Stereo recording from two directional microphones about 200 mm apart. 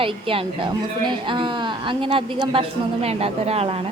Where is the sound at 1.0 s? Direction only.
25° right (ahead or behind).